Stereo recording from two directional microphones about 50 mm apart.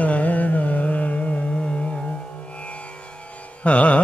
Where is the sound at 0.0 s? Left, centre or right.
Left.